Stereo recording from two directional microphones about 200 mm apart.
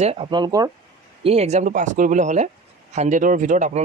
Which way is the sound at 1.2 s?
30° right (ahead or behind).